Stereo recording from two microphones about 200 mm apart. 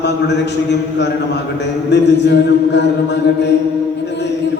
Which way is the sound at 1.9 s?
60° left (ahead or behind).